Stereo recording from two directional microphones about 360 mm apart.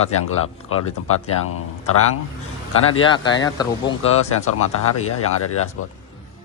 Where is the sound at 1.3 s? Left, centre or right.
Left.